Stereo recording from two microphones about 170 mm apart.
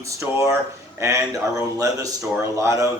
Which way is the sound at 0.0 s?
15° right (ahead or behind).